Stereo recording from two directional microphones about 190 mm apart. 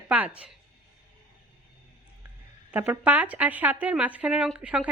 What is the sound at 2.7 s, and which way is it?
Speech, 10° right (ahead or behind).